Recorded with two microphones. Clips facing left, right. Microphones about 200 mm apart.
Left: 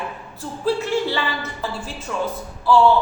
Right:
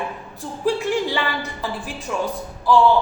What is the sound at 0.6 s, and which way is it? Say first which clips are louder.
Speech: even; 15° right (ahead or behind).